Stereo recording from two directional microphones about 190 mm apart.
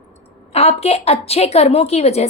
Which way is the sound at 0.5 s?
35° left (ahead or behind).